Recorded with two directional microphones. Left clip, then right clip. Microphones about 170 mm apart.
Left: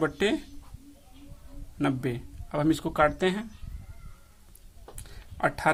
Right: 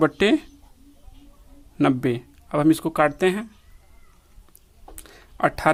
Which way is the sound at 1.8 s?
45° right (ahead or behind).